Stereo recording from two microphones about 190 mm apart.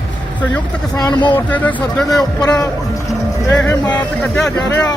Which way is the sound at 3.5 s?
5° left (ahead or behind).